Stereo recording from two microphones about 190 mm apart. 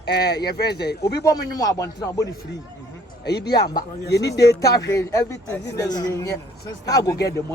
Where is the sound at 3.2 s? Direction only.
60° left (ahead or behind).